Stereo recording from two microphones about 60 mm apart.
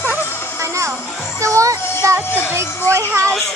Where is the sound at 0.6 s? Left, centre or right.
Right.